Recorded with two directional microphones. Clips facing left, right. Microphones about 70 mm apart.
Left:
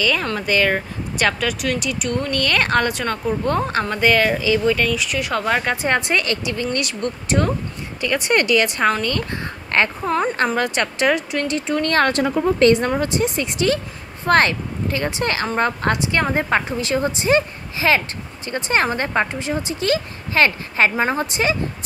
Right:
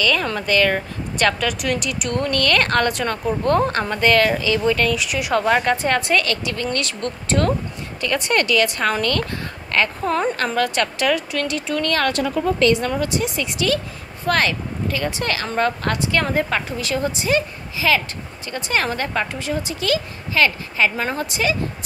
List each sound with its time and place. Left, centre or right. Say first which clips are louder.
0.0 s speech: even; centre
5.8 s speech: even; centre
10.0 s speech: even; centre
10.3 s a woman's voice: left 1 dB; left
20.9 s a woman's voice: left 4 dB; left